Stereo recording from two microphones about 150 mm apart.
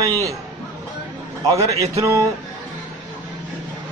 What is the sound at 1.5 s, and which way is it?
Speech, 20° right (ahead or behind).